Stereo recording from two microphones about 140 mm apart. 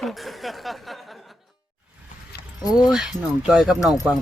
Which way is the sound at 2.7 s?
5° right (ahead or behind).